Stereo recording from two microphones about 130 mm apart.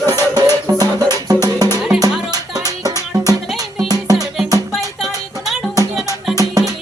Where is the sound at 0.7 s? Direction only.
30° right (ahead or behind).